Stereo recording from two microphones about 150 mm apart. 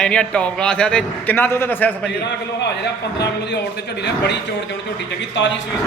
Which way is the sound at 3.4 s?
90° left.